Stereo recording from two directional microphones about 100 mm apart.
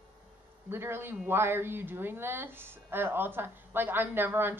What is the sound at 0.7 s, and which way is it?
Speech, 25° right (ahead or behind).